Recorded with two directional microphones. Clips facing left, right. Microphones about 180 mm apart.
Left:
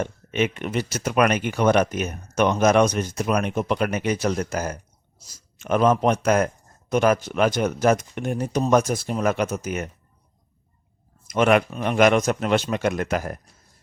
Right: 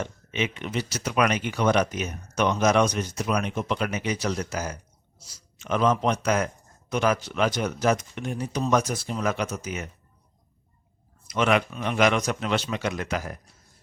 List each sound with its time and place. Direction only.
0.0 s speech: 50° left (ahead or behind)
11.3 s speech: 50° left (ahead or behind)